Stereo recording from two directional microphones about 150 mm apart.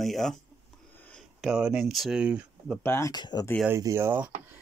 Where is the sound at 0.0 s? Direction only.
Centre (ahead or behind).